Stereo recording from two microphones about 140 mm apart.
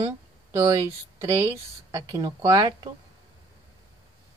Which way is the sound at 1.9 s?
25° right (ahead or behind).